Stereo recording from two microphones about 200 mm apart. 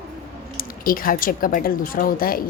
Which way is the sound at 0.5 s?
45° left (ahead or behind).